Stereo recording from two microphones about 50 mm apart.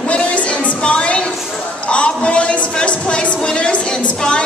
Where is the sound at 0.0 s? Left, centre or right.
Left.